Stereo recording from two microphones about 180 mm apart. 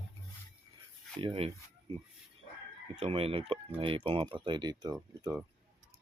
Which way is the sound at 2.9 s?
30° right (ahead or behind).